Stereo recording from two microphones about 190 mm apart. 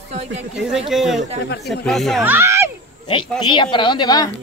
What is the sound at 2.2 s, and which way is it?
Speech, 10° right (ahead or behind).